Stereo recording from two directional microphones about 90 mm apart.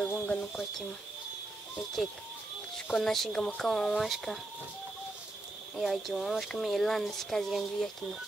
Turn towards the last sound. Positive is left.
turn(degrees=0)  # may be behind; listen again after turning